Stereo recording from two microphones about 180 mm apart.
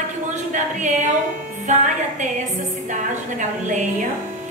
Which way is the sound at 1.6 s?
45° right (ahead or behind).